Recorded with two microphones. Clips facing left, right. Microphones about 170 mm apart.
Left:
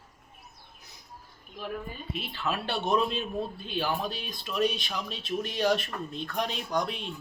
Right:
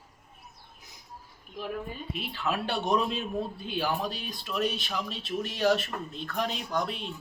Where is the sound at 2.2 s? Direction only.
10° right (ahead or behind).